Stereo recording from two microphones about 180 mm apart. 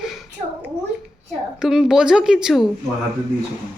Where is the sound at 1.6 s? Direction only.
5° right (ahead or behind).